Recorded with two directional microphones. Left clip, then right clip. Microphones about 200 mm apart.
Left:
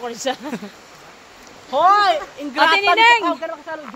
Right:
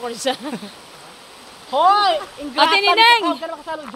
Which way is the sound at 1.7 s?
35° left (ahead or behind).